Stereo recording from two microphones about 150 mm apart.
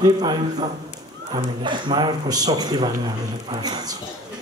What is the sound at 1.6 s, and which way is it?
A man's voice, 30° right (ahead or behind).